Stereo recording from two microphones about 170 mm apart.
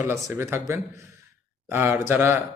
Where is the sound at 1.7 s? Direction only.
15° right (ahead or behind).